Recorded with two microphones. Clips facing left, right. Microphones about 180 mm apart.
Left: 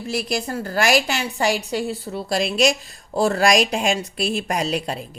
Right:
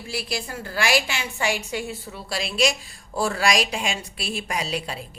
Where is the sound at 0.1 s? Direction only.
45° left (ahead or behind).